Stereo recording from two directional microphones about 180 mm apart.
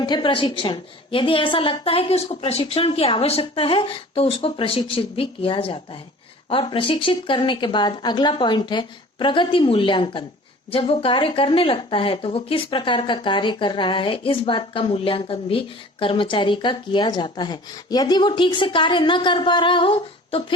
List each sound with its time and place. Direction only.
0.0 s a woman's voice: 25° left (ahead or behind)